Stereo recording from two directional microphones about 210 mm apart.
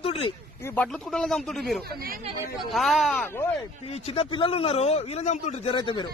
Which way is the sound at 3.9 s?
30° left (ahead or behind).